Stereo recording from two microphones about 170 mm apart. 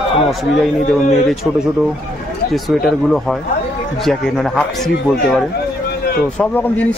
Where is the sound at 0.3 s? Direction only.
Centre (ahead or behind).